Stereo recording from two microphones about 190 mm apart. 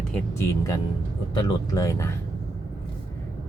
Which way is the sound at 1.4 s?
20° left (ahead or behind).